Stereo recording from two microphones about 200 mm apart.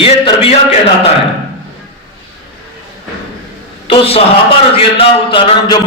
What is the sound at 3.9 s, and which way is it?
A man's voice, 30° left (ahead or behind).